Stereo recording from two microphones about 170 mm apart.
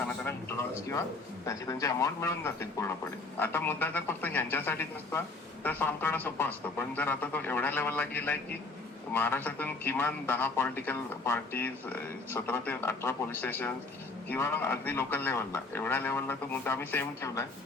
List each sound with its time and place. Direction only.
0.3 s a man's voice: 15° left (ahead or behind)